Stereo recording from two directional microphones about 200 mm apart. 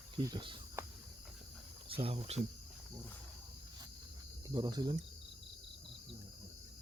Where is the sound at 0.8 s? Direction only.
15° right (ahead or behind).